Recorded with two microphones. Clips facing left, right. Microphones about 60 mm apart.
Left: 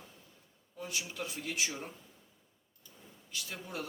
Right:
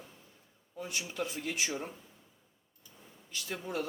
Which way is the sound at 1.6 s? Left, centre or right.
Centre.